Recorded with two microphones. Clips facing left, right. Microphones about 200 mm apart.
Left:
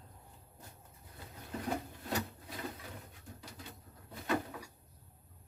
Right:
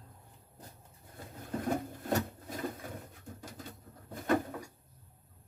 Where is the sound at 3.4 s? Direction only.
50° right (ahead or behind).